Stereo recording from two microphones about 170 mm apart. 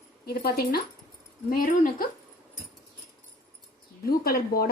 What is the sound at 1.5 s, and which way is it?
Speech, 55° left (ahead or behind).